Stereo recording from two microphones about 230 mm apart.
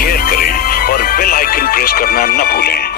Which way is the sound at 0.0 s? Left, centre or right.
Left.